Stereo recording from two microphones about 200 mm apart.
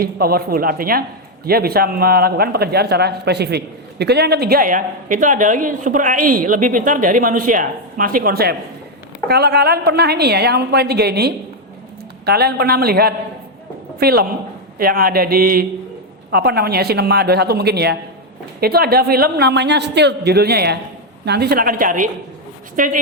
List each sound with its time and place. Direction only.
0.0 s a man's voice: 50° right (ahead or behind)